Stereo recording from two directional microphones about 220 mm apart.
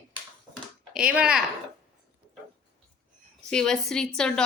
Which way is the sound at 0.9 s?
5° right (ahead or behind).